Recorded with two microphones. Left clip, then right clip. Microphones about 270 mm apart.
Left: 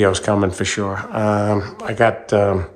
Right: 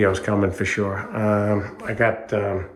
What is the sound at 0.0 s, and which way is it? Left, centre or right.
Speech, centre.